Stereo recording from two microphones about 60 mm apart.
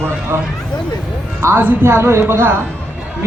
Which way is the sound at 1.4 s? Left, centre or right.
Right.